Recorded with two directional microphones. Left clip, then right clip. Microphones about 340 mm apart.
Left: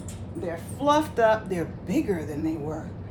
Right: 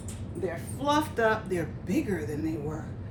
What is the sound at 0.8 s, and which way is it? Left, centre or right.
A woman's voice, centre.